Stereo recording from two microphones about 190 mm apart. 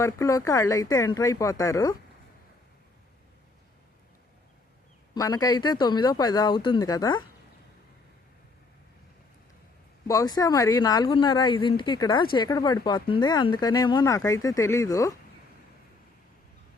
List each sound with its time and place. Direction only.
0.0 s speech: 15° left (ahead or behind)
5.1 s speech: 20° left (ahead or behind)
10.1 s speech: 20° left (ahead or behind)